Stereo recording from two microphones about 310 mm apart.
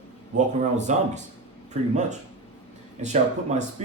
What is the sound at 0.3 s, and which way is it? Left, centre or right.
Speech, right.